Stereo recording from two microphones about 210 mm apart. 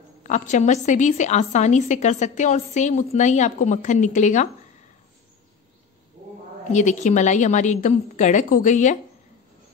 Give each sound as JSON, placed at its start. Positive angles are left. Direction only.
{"t": 0.2, "sound": "a woman's voice", "side_deg": 35}
{"t": 6.7, "sound": "a woman's voice", "side_deg": 35}